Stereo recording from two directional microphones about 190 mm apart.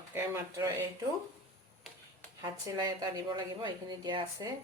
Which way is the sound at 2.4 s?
20° right (ahead or behind).